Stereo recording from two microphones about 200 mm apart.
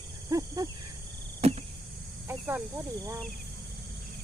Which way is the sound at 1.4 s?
30° right (ahead or behind).